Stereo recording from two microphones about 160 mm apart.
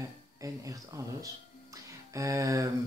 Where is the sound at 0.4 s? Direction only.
20° right (ahead or behind).